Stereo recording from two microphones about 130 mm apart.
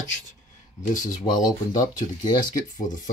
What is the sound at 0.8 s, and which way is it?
Speech, 85° left.